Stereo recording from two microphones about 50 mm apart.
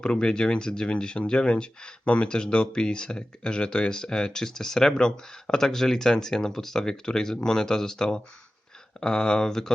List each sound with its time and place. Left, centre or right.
0.0 s speech: centre